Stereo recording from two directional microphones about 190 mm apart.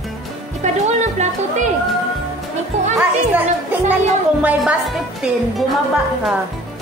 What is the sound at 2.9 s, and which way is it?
Speech, 10° right (ahead or behind).